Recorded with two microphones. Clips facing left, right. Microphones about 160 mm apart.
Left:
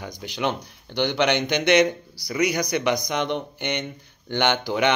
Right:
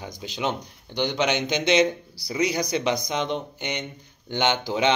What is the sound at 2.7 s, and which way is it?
A man's voice, 60° left (ahead or behind).